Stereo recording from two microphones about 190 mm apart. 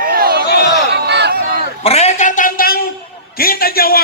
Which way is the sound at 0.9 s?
60° right (ahead or behind).